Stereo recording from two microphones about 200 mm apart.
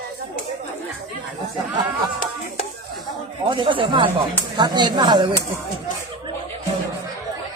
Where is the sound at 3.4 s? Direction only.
25° right (ahead or behind).